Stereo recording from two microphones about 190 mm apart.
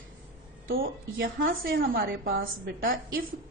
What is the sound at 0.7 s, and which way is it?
A woman's voice, 50° right (ahead or behind).